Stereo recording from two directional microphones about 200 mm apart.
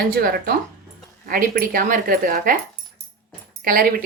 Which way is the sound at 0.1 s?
50° right (ahead or behind).